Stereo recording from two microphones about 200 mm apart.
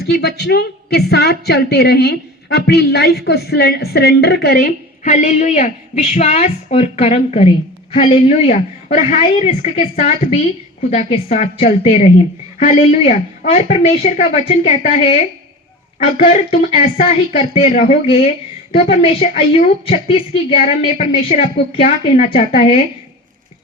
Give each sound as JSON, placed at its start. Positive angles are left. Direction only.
{"t": 0.0, "sound": "speech", "side_deg": 55}
{"t": 5.0, "sound": "a woman's voice", "side_deg": 35}